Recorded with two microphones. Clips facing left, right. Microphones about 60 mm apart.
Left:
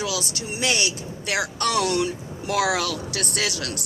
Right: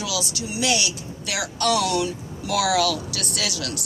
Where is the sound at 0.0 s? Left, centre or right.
Left.